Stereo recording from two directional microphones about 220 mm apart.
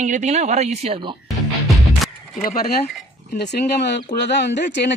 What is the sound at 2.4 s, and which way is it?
Speech, 40° left (ahead or behind).